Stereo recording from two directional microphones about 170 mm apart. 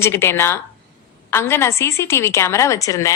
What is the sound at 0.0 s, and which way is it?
A woman's voice, 15° left (ahead or behind).